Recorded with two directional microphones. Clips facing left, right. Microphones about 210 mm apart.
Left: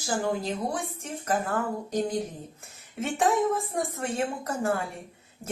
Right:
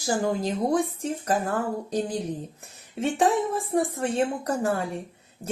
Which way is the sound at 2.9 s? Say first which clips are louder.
Right 2 dB; 35° right (ahead or behind).